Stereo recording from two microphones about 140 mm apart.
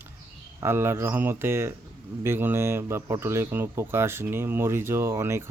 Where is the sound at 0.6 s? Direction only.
15° right (ahead or behind).